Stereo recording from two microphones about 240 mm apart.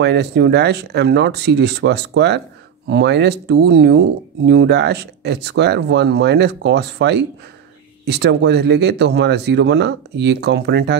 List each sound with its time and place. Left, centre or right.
0.0 s speech: right